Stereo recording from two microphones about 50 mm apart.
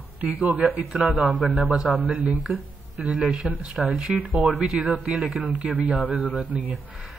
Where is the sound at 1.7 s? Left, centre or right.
Right.